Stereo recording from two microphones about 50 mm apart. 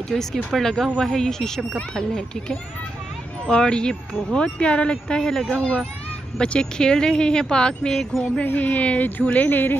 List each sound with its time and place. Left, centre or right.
0.1 s speech: centre
5.1 s speech: centre
8.5 s speech: left